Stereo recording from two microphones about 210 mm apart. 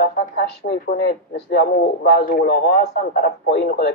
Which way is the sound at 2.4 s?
55° left (ahead or behind).